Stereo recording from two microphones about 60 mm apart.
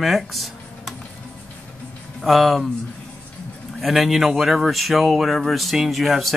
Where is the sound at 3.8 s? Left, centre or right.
Centre.